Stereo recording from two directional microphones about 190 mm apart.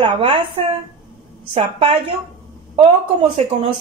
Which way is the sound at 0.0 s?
25° right (ahead or behind).